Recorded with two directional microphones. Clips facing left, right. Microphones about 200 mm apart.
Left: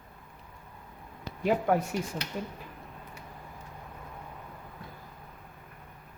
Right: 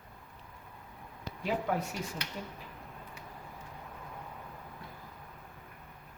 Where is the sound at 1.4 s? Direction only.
50° left (ahead or behind).